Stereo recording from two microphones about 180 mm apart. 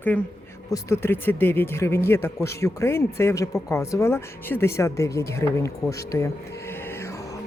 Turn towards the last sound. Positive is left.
turn(degrees=15)  # may be behind; listen again after turning